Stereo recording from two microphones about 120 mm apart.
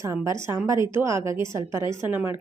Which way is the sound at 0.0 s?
25° right (ahead or behind).